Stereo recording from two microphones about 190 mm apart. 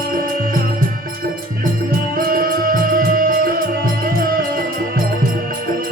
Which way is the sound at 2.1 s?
50° right (ahead or behind).